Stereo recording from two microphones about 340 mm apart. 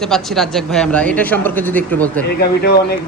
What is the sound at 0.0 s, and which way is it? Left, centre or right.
Speech, centre.